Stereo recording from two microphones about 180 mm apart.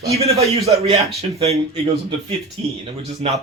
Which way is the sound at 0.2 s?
35° right (ahead or behind).